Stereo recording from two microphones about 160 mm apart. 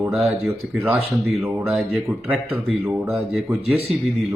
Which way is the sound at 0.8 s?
15° right (ahead or behind).